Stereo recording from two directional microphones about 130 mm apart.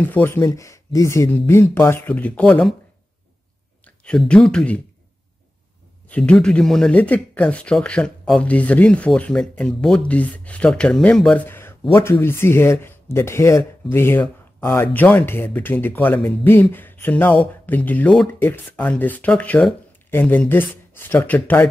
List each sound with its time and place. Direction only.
0.0 s speech: 15° left (ahead or behind)
3.8 s speech: 10° left (ahead or behind)
6.0 s speech: 10° left (ahead or behind)